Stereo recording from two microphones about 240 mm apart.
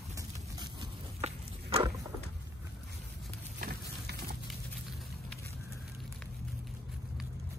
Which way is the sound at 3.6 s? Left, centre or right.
Right.